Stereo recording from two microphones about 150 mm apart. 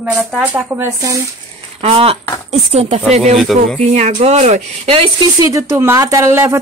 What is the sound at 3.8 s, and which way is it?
Speech, 50° right (ahead or behind).